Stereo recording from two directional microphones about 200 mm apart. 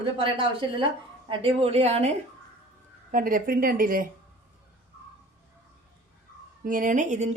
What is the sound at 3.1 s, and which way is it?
Speech, 45° right (ahead or behind).